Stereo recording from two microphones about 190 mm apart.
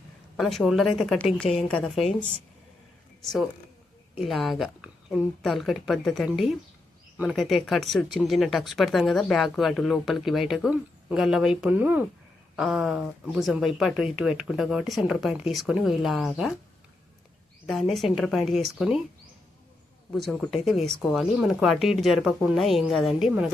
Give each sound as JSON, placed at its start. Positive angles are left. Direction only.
{"t": 0.3, "sound": "speech", "side_deg": 0}
{"t": 3.2, "sound": "speech", "side_deg": 0}
{"t": 17.7, "sound": "speech", "side_deg": 0}
{"t": 20.1, "sound": "speech", "side_deg": 0}